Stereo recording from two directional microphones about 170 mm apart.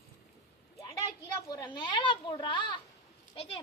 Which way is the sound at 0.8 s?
25° left (ahead or behind).